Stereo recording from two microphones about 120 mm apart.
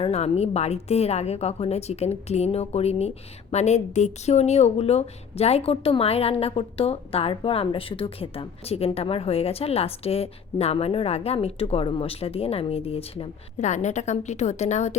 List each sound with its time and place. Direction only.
0.0 s speech: 60° left (ahead or behind)
13.6 s a woman's voice: 80° left